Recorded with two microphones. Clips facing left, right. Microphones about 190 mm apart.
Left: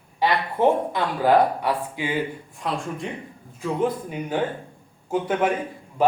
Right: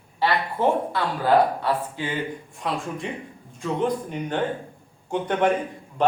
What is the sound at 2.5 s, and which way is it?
A man's voice, centre (ahead or behind).